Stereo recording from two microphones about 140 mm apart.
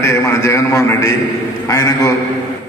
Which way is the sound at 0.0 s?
20° left (ahead or behind).